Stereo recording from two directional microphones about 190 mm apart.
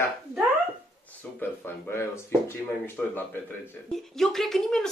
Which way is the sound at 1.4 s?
10° left (ahead or behind).